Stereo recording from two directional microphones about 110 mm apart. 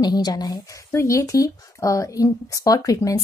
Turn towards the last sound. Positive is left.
turn(degrees=30)  # may be behind; listen again after turning